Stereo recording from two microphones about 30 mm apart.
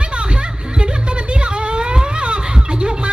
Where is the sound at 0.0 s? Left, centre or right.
Right.